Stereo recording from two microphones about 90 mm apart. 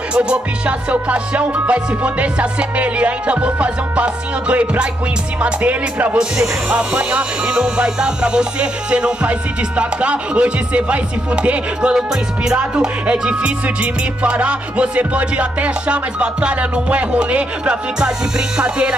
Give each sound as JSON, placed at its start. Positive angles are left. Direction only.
{"t": 0.1, "sound": "music", "side_deg": -10}